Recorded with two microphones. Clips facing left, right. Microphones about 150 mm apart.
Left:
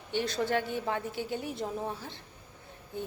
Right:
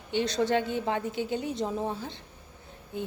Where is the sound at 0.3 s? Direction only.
80° right.